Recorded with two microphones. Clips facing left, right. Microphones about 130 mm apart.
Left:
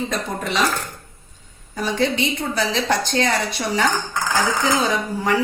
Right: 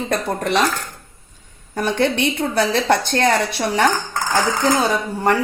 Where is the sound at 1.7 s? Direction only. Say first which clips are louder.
Right 2 dB; 60° right (ahead or behind).